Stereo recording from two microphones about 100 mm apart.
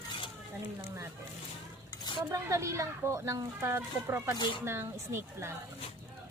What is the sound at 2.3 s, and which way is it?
Speech, 30° right (ahead or behind).